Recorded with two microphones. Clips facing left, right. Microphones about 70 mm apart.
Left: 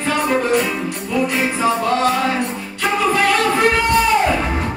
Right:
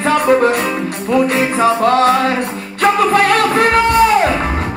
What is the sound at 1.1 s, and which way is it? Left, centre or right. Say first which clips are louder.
Music: right 6 dB; right.